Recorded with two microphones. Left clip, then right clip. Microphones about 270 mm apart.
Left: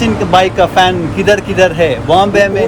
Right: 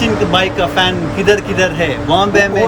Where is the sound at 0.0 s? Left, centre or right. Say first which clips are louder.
Left 3 dB; centre.